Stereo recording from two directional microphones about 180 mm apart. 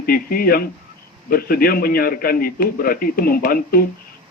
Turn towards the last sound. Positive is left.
turn(degrees=55)  # may be behind; listen again after turning